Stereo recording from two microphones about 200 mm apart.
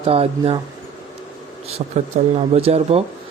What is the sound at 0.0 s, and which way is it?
Speech, 30° right (ahead or behind).